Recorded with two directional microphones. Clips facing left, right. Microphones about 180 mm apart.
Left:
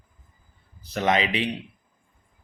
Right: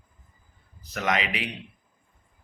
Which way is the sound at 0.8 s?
30° left (ahead or behind).